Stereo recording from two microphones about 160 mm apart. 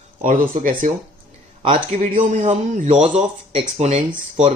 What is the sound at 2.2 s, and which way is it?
A man's voice, 50° right (ahead or behind).